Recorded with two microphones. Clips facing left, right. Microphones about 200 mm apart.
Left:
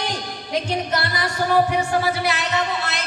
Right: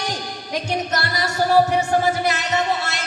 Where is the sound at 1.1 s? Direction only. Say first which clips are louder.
Right 3 dB; 45° right (ahead or behind).